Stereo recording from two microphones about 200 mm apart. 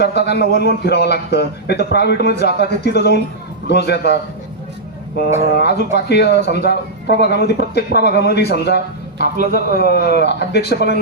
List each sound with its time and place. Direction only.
0.0 s speech: 55° left (ahead or behind)
5.4 s speech: 55° left (ahead or behind)